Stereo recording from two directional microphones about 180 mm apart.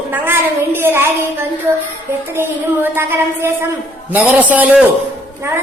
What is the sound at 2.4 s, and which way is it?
A woman's voice, 10° right (ahead or behind).